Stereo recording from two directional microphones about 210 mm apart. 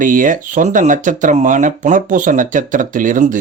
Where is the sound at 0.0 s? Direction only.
40° right (ahead or behind).